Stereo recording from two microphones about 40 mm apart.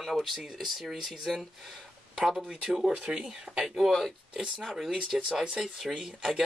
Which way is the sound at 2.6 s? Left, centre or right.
Centre.